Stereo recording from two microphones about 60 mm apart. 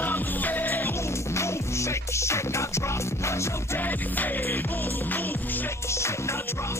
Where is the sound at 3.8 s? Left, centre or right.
Left.